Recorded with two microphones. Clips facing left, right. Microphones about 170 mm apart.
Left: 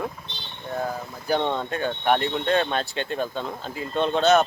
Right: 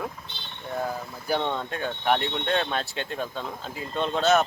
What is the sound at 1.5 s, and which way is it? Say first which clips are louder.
Speech: left 3 dB; centre (ahead or behind).